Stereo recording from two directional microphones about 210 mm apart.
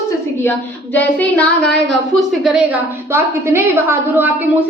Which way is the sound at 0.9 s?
5° left (ahead or behind).